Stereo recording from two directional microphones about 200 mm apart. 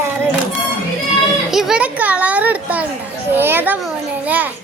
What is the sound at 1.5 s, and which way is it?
A child's voice, centre (ahead or behind).